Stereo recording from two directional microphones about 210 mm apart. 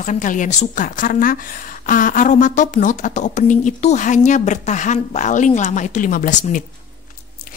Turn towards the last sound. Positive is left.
turn(degrees=40)  # may be behind; listen again after turning